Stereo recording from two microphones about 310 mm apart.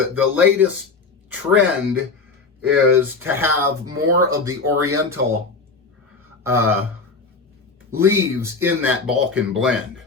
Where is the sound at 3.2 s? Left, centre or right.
Centre.